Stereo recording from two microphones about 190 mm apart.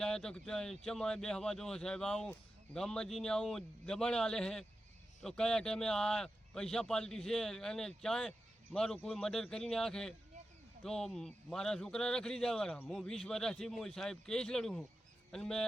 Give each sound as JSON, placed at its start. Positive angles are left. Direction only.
{"t": 0.0, "sound": "speech", "side_deg": 5}